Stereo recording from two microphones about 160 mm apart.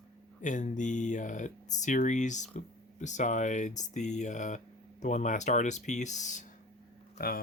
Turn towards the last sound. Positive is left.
turn(degrees=65)  # may be behind; listen again after turning